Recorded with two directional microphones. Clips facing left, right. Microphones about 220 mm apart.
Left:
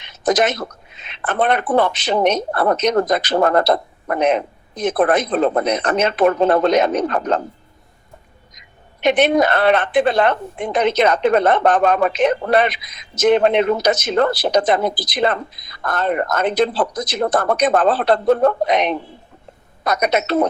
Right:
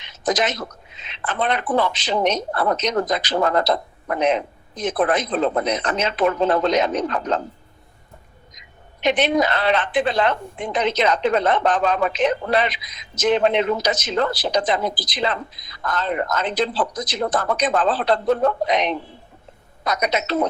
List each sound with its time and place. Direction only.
0.0 s a woman's voice: 55° left (ahead or behind)
8.5 s a woman's voice: 55° left (ahead or behind)